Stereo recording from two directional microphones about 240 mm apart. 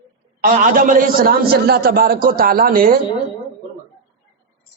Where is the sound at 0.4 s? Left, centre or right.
Right.